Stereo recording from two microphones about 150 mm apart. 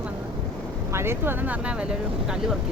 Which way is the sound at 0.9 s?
15° right (ahead or behind).